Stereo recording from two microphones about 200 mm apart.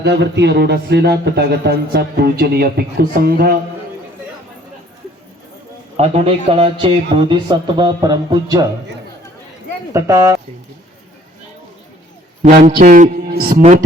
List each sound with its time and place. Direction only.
0.0 s speech: 60° right (ahead or behind)
6.0 s speech: 30° right (ahead or behind)
9.9 s speech: 15° right (ahead or behind)
12.5 s a man's voice: 40° right (ahead or behind)